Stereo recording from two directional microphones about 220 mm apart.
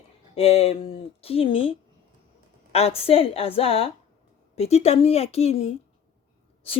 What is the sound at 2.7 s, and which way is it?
Speech, 25° left (ahead or behind).